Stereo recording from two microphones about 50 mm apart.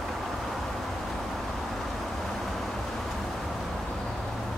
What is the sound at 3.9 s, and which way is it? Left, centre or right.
Vehicle, centre.